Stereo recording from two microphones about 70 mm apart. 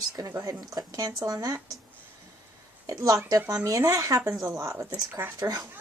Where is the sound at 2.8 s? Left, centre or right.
Right.